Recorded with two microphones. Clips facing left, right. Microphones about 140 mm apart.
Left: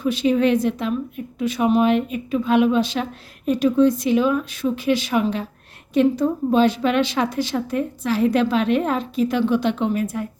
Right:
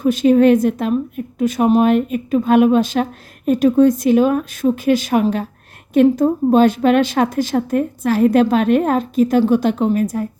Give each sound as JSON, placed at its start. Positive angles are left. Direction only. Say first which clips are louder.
{"t": 0.0, "sound": "a woman's voice", "louder": "right 6 dB", "side_deg": -45}